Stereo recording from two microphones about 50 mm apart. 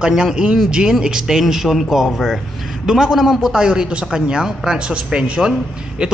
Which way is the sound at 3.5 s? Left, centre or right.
Centre.